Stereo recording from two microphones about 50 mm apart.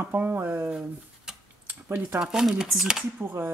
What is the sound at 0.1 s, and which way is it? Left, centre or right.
Speech, right.